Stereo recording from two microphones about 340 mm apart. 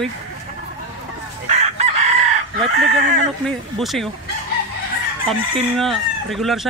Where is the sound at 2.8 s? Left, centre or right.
Right.